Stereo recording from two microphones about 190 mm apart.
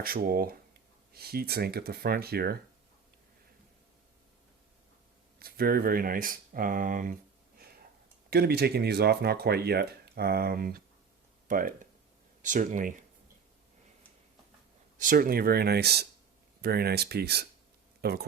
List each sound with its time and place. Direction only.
0.0 s speech: 50° right (ahead or behind)
5.4 s speech: 55° right (ahead or behind)
8.3 s speech: 55° right (ahead or behind)
14.9 s speech: 45° right (ahead or behind)